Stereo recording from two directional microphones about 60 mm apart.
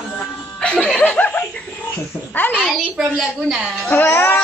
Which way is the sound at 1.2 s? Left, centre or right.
Left.